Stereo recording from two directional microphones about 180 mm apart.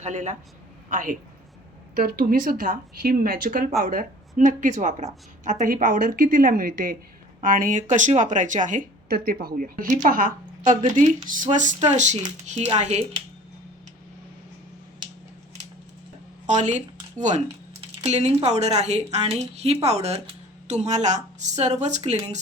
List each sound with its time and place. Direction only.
0.0 s speech: 40° right (ahead or behind)
16.5 s speech: 40° right (ahead or behind)
17.7 s typing: 35° right (ahead or behind)
18.4 s speech: 40° right (ahead or behind)